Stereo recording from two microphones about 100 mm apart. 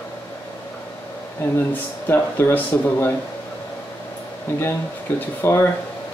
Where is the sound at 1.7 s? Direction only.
25° left (ahead or behind).